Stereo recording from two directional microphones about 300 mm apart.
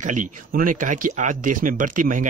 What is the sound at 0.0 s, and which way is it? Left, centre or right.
Speech, right.